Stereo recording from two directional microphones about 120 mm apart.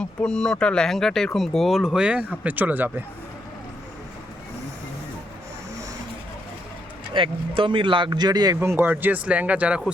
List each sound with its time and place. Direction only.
0.0 s speech: 10° left (ahead or behind); by 2.9 s 15° right (ahead or behind)
7.1 s speech: 45° right (ahead or behind)
8.5 s speech: 20° right (ahead or behind)